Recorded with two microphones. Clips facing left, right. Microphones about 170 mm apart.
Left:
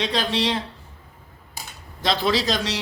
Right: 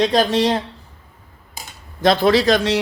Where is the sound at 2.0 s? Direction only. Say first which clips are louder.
Right 8 dB; 55° right (ahead or behind).